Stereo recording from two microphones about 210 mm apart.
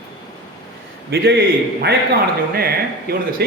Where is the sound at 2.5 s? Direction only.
45° right (ahead or behind).